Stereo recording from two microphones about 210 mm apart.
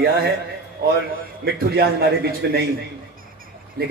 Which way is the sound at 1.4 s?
50° right (ahead or behind).